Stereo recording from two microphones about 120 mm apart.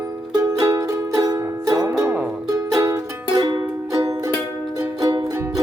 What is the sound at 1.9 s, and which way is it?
Music, 10° right (ahead or behind).